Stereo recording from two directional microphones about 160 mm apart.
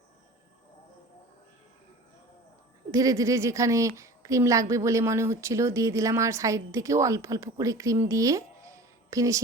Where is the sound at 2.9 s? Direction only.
20° right (ahead or behind).